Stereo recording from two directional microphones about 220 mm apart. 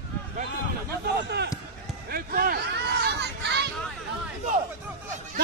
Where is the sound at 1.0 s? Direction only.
50° right (ahead or behind).